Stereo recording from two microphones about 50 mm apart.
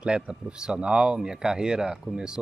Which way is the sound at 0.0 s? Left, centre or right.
Centre.